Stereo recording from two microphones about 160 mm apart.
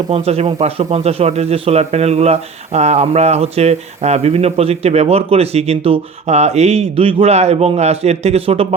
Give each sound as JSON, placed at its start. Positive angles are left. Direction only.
{"t": 0.1, "sound": "a man's voice", "side_deg": -40}